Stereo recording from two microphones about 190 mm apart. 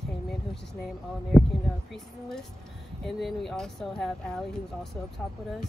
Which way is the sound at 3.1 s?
Centre (ahead or behind).